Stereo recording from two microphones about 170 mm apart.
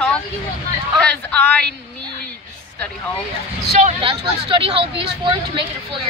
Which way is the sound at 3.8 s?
35° right (ahead or behind).